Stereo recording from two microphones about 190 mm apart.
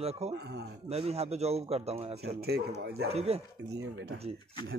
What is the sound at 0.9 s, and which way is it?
Speech, 35° right (ahead or behind).